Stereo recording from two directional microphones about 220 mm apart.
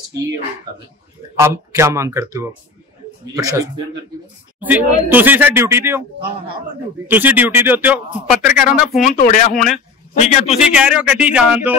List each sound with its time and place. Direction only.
1.3 s a man's voice: 15° right (ahead or behind)
7.1 s a man's voice: 10° right (ahead or behind)
9.0 s a man's voice: 35° left (ahead or behind)
10.6 s speech: 5° right (ahead or behind)